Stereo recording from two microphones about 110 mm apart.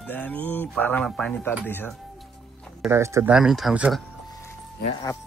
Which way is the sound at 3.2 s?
5° right (ahead or behind).